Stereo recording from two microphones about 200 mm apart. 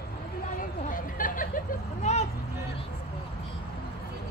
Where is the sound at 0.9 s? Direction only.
45° left (ahead or behind).